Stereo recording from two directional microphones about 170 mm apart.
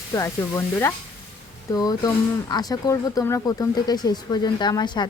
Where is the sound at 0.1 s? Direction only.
15° left (ahead or behind).